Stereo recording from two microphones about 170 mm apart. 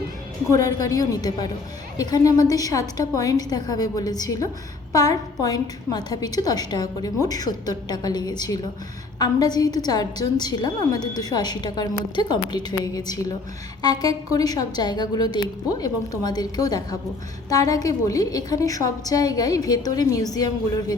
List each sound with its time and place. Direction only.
0.8 s a woman's voice: 20° left (ahead or behind)